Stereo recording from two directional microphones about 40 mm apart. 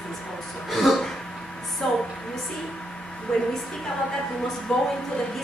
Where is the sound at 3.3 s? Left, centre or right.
Centre.